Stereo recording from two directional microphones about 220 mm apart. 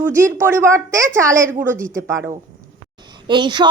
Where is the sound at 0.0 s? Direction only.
10° right (ahead or behind).